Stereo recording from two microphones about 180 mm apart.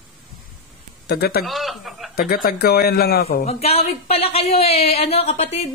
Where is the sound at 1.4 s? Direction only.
Centre (ahead or behind).